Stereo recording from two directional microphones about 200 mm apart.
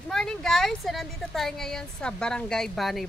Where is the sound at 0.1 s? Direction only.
5° left (ahead or behind).